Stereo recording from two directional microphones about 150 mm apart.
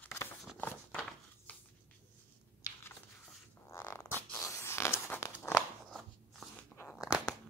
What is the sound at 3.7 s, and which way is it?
Zipper, 15° left (ahead or behind).